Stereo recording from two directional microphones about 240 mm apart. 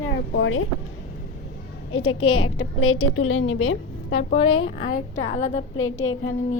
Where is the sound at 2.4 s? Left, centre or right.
Left.